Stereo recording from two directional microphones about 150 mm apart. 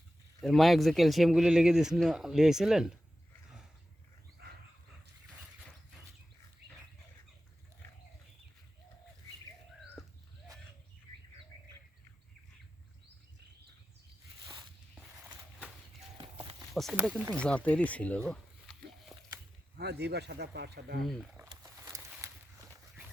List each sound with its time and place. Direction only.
0.4 s speech: centre (ahead or behind)
10.0 s a sound: centre (ahead or behind)
16.1 s walk: 35° right (ahead or behind)
16.9 s speech: 10° right (ahead or behind)
17.3 s speech: 10° left (ahead or behind)
19.1 s a sound: centre (ahead or behind)
19.7 s speech: 90° right
21.0 s speech: centre (ahead or behind)
21.5 s wild animals: 20° right (ahead or behind)